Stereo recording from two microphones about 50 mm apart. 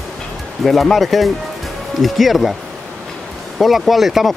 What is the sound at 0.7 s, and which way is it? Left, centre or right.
Speech, centre.